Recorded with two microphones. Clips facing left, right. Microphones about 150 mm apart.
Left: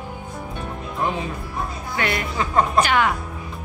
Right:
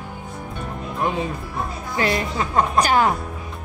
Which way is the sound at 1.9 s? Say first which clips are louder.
Right 3 dB; 30° right (ahead or behind).